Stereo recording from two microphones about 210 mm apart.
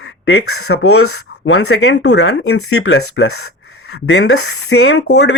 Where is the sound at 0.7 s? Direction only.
55° left (ahead or behind).